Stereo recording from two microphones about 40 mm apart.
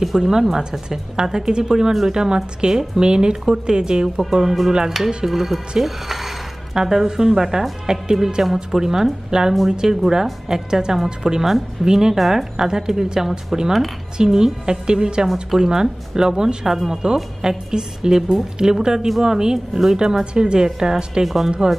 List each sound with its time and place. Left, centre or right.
0.2 s a woman's voice: centre
21.6 s speech: right